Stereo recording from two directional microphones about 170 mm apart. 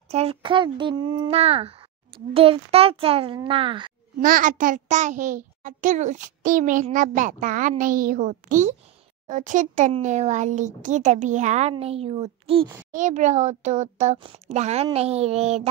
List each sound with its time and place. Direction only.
0.1 s a child's voice: 35° right (ahead or behind)
4.2 s a child's voice: 55° right (ahead or behind); by 12.6 s 35° right (ahead or behind)
12.9 s a child's voice: 45° right (ahead or behind)